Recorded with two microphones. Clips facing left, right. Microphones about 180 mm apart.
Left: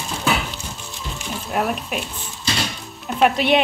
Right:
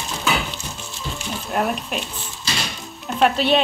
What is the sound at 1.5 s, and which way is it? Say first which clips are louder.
Zipper: even; 5° left (ahead or behind).